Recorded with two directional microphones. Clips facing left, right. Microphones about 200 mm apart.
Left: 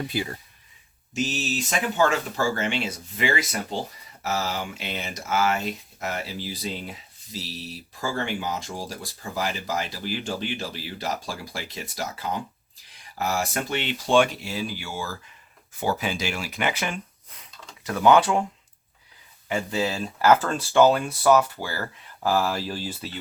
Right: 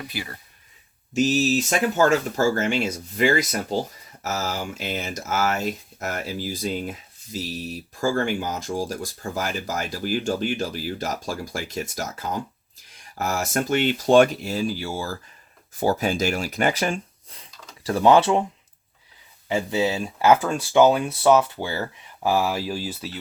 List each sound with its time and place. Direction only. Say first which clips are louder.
1.2 s speech: right 8 dB; centre (ahead or behind)
1.5 s speech: right 4 dB; 45° right (ahead or behind); by 18.4 s 25° right (ahead or behind)
20.1 s speech: right 1 dB; 20° right (ahead or behind)